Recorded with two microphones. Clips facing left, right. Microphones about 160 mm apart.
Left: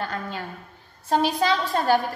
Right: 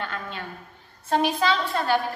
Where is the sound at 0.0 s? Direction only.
40° left (ahead or behind).